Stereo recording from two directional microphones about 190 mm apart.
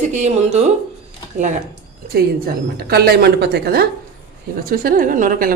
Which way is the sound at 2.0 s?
55° right (ahead or behind).